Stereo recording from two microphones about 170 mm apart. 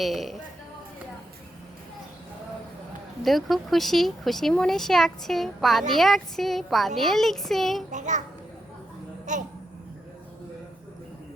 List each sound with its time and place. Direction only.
0.0 s speech: centre (ahead or behind)
3.2 s speech: centre (ahead or behind)
7.9 s a child's voice: 45° right (ahead or behind)
9.3 s a child's voice: 45° right (ahead or behind)